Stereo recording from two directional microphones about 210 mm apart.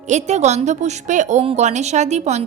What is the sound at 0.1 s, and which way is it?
A woman's voice, 35° right (ahead or behind).